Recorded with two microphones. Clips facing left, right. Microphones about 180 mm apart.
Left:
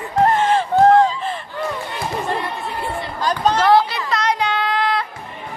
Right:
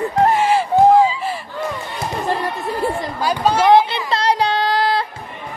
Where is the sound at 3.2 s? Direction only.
10° right (ahead or behind).